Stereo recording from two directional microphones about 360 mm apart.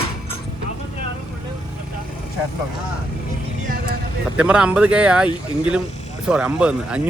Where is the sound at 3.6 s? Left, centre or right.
Right.